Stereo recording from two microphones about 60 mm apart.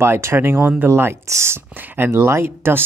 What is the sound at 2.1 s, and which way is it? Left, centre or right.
Speech, right.